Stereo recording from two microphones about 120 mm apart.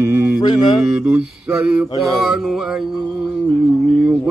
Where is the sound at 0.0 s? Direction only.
20° right (ahead or behind).